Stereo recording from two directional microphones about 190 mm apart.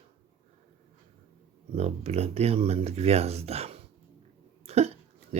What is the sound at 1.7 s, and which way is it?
Speech, 35° right (ahead or behind).